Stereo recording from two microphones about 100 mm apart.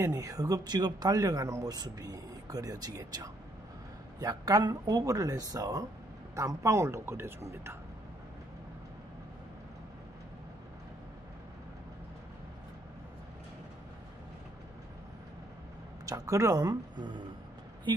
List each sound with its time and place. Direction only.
0.0 s speech: 35° right (ahead or behind)
16.1 s speech: 35° right (ahead or behind)